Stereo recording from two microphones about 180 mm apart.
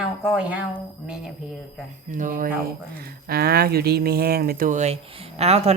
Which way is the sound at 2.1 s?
45° right (ahead or behind).